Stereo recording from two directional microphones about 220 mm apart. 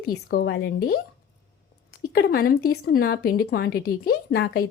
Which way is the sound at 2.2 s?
45° left (ahead or behind).